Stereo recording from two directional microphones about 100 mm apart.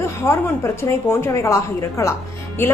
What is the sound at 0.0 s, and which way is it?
A woman's voice, 25° left (ahead or behind).